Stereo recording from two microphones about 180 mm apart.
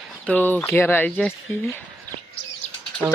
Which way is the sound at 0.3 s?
10° left (ahead or behind).